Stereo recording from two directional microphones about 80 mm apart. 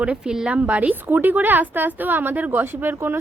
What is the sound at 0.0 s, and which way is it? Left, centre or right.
A woman's voice, centre.